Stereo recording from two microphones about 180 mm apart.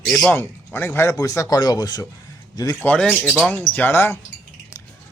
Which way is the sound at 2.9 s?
5° left (ahead or behind).